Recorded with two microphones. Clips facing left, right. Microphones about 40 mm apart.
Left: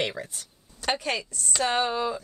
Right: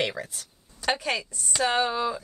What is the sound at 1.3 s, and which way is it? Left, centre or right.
Speech, centre.